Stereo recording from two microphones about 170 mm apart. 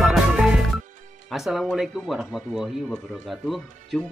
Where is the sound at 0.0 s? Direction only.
Centre (ahead or behind).